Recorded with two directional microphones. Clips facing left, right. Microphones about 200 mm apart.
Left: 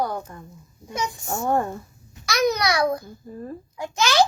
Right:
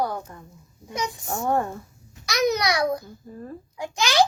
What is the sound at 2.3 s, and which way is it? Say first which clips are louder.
A child's voice: left 1 dB; 20° right (ahead or behind).